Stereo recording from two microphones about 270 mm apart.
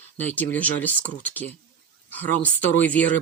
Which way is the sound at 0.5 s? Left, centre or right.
Centre.